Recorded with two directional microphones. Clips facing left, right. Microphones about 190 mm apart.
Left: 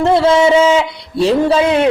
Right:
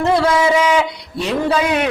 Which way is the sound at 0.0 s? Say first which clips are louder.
Left 4 dB; 25° left (ahead or behind).